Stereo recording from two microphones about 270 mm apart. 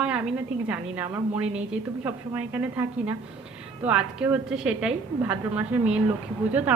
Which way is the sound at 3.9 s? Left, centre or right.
Centre.